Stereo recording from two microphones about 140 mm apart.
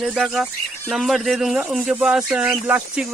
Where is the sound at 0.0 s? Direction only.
Centre (ahead or behind).